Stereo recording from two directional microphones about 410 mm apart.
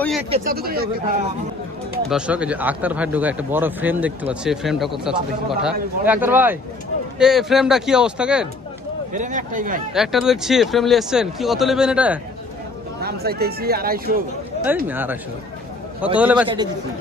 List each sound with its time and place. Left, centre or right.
0.3 s speech: centre
2.0 s speech: centre
9.1 s speech: centre
9.9 s speech: centre
13.0 s speech: right
14.9 s speech: centre